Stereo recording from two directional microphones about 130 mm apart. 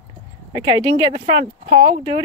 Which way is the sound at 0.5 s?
35° right (ahead or behind).